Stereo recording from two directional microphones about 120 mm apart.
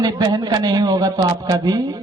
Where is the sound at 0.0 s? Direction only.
35° right (ahead or behind).